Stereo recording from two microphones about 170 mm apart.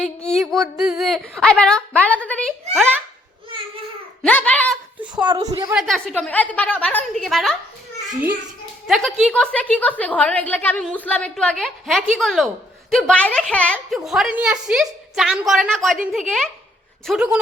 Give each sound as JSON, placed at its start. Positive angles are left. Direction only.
{"t": 0.3, "sound": "a woman's voice", "side_deg": 0}
{"t": 4.2, "sound": "a sound", "side_deg": 10}
{"t": 5.2, "sound": "a woman's voice", "side_deg": -25}
{"t": 5.7, "sound": "a woman's voice", "side_deg": 0}
{"t": 8.9, "sound": "a woman's voice", "side_deg": 0}